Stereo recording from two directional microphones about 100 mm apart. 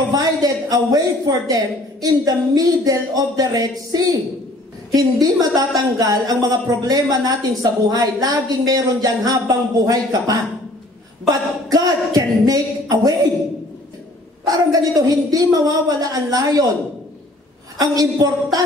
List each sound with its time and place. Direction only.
0.1 s speech: 40° right (ahead or behind)
14.4 s speech: 40° right (ahead or behind)
17.7 s speech: 40° right (ahead or behind)